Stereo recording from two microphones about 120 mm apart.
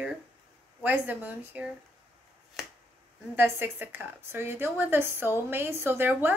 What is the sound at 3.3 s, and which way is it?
A woman's voice, 20° right (ahead or behind).